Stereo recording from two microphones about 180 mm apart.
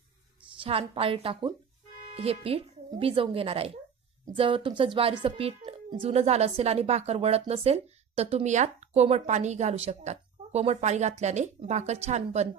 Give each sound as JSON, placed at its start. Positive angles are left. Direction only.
{"t": 0.6, "sound": "speech", "side_deg": -30}